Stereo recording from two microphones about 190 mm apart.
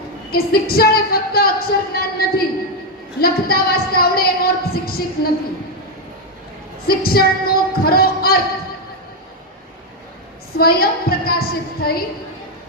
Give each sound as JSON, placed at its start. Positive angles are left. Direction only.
{"t": 0.3, "sound": "a woman's voice", "side_deg": 55}
{"t": 6.8, "sound": "a woman's voice", "side_deg": 55}
{"t": 10.6, "sound": "a woman's voice", "side_deg": 55}